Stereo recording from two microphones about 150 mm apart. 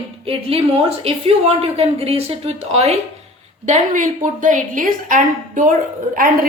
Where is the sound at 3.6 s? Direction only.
55° right (ahead or behind).